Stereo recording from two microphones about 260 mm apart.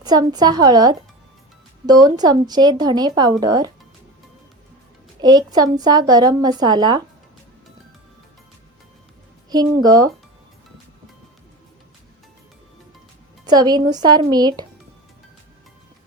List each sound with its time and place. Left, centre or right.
0.0 s a woman's voice: centre
5.2 s a woman's voice: centre
9.8 s a woman's voice: centre
13.5 s a woman's voice: centre